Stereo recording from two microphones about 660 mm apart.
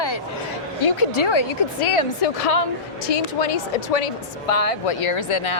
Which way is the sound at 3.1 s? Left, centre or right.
Left.